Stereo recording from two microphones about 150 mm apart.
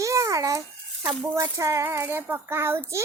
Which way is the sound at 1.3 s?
15° right (ahead or behind).